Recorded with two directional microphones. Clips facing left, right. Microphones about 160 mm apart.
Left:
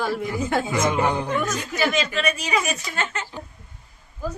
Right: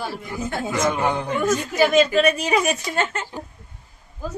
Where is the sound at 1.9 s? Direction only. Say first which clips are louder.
Right 8 dB; 50° right (ahead or behind).